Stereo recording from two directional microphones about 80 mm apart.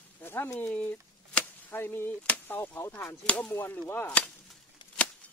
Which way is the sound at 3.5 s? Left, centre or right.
Left.